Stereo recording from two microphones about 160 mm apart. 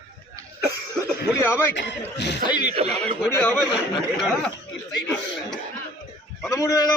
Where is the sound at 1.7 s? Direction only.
90° left.